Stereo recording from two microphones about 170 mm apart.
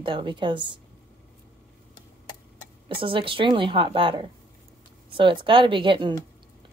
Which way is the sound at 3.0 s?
30° right (ahead or behind).